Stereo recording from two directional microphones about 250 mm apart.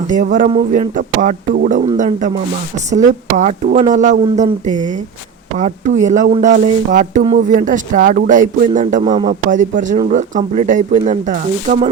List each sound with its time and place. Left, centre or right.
0.1 s a woman's voice: right
9.0 s speech: centre
9.5 s a woman's voice: right